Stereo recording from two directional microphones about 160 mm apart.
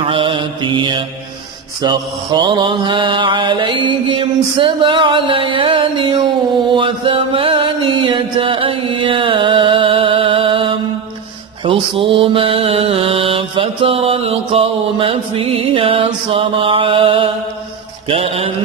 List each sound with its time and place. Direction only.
0.0 s mantra: 35° right (ahead or behind)
6.7 s music: 30° right (ahead or behind)
11.6 s mantra: 35° right (ahead or behind)